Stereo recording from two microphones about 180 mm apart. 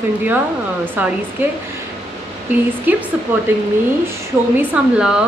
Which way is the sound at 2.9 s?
10° right (ahead or behind).